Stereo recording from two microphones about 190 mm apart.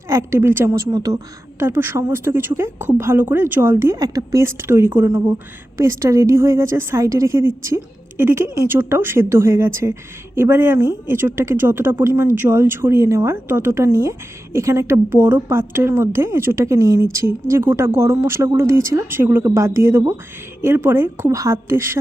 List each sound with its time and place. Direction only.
0.1 s speech: 15° right (ahead or behind)